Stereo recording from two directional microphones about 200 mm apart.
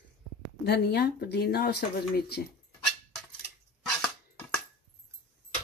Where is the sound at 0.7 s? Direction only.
55° left (ahead or behind).